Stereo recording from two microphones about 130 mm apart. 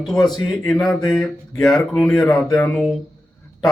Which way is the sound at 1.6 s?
Centre (ahead or behind).